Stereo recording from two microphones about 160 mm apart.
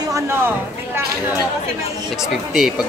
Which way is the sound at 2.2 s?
5° right (ahead or behind).